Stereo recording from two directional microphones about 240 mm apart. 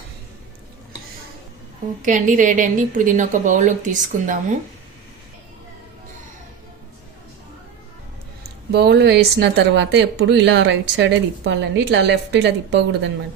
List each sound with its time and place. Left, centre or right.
2.0 s a woman's voice: right
8.4 s speech: right